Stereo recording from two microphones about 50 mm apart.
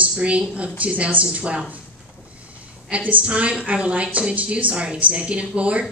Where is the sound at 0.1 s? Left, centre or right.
Right.